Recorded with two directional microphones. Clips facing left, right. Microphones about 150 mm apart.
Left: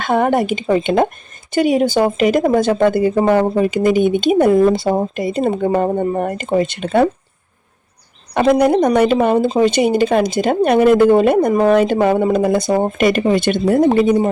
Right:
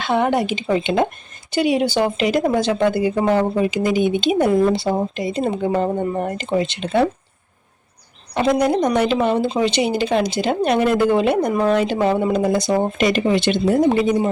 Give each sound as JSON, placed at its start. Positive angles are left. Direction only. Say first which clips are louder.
{"t": 0.0, "sound": "speech", "louder": "left 3 dB", "side_deg": 50}
{"t": 8.3, "sound": "speech", "louder": "left 5 dB", "side_deg": 60}